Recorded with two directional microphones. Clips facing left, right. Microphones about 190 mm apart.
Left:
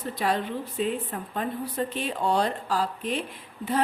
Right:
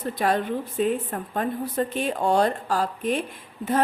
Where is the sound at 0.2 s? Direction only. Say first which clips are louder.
Right 3 dB; 50° right (ahead or behind).